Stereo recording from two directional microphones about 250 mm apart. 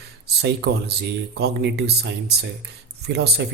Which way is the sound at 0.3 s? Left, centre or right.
Right.